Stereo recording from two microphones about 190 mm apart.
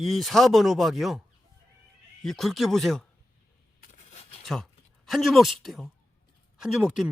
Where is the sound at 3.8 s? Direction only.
40° left (ahead or behind).